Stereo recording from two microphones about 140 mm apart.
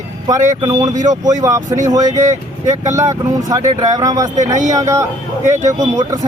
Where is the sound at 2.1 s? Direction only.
60° right (ahead or behind).